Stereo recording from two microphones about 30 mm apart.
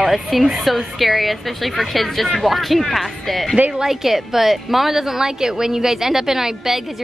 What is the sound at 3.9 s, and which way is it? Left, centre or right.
A woman's voice, centre.